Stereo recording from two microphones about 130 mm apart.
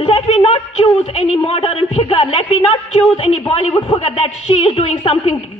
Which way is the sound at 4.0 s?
50° left (ahead or behind).